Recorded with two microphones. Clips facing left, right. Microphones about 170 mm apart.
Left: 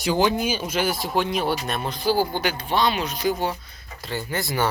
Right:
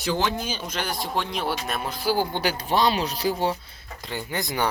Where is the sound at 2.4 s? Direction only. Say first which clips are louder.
Even; 40° right (ahead or behind).